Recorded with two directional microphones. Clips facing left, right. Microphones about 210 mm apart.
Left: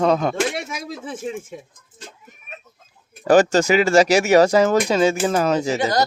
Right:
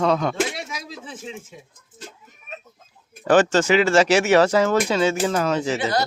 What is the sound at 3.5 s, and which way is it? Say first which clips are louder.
Speech: left 2 dB; 40° left (ahead or behind).